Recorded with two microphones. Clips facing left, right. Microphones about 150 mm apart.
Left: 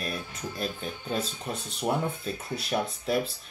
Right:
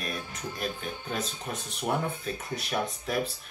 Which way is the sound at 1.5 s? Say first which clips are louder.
Left 2 dB; 30° left (ahead or behind).